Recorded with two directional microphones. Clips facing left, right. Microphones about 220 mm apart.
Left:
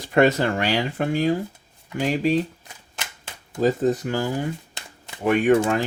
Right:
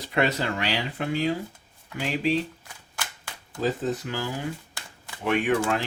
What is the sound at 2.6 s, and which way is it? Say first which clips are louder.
Cap gun: even; 20° left (ahead or behind).